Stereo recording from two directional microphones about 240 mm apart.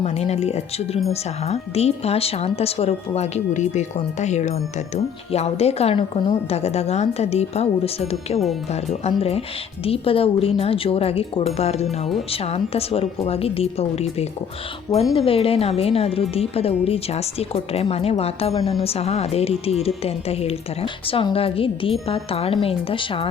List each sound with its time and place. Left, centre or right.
0.0 s a woman's voice: left